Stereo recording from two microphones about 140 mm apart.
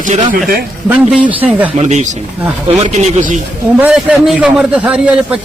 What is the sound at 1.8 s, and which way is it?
Speech, 55° right (ahead or behind).